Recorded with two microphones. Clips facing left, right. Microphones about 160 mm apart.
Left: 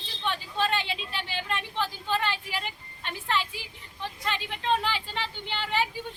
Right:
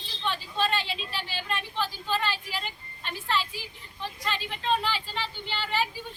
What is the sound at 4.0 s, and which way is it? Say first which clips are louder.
A woman's voice: even; 15° left (ahead or behind).